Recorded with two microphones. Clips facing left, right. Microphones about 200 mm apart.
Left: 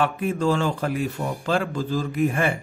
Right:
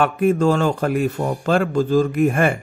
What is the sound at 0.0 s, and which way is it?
Speech, 50° right (ahead or behind).